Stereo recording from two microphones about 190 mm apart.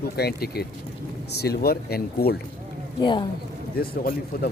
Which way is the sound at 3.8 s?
50° left (ahead or behind).